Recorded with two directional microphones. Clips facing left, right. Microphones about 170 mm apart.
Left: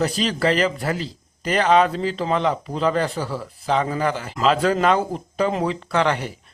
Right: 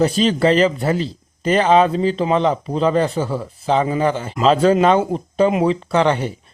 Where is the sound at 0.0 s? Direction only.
25° right (ahead or behind).